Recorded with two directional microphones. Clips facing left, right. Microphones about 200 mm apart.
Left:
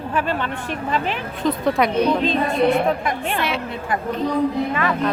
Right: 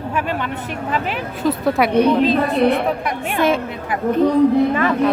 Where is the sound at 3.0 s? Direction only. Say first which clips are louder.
Even; 10° right (ahead or behind).